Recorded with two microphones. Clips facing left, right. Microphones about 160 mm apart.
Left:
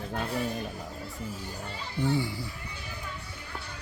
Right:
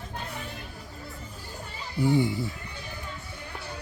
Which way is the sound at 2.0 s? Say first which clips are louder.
Right 5 dB; 15° right (ahead or behind).